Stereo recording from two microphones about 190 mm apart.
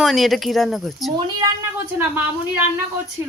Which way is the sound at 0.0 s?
Centre (ahead or behind).